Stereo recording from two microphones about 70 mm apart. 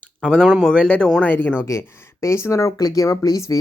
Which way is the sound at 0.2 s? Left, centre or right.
Centre.